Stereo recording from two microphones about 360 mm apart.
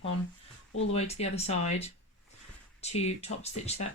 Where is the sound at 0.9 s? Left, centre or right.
Centre.